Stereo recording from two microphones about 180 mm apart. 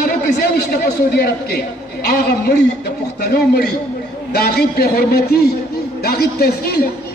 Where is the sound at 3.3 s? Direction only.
60° left (ahead or behind).